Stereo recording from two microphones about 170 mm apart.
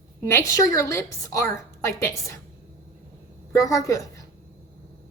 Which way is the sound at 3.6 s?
20° left (ahead or behind).